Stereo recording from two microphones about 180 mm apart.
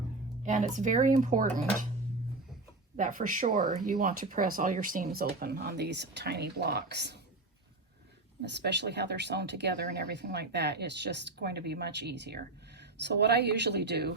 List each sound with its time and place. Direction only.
0.4 s speech: 45° right (ahead or behind)
2.9 s speech: 45° right (ahead or behind); by 7.2 s 70° right (ahead or behind)
8.4 s speech: 70° right (ahead or behind)